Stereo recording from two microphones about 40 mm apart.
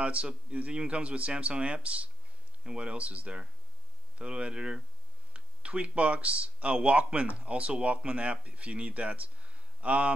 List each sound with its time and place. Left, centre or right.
0.0 s speech: right